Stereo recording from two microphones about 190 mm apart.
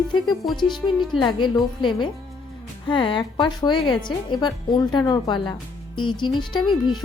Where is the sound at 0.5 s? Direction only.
25° left (ahead or behind).